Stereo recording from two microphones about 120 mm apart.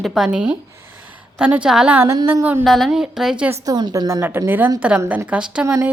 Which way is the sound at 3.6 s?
35° right (ahead or behind).